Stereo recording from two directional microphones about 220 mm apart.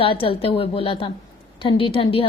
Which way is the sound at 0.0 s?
25° left (ahead or behind).